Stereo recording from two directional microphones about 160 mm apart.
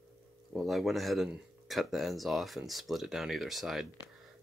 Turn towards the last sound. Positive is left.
turn(degrees=0)  # may be behind; listen again after turning